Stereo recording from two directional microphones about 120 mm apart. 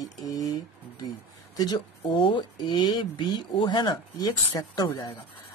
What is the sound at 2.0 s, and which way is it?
Speech, 45° left (ahead or behind).